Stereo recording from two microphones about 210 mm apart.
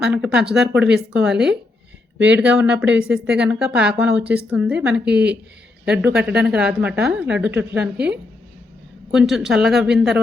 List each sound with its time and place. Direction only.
0.0 s a woman's voice: 5° right (ahead or behind)
9.1 s a woman's voice: centre (ahead or behind)